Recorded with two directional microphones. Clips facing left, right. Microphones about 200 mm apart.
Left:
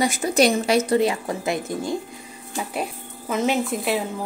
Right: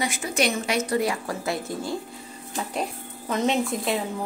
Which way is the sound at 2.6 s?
5° left (ahead or behind).